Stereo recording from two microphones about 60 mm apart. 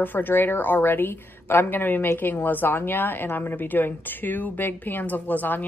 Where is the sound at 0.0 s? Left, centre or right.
Left.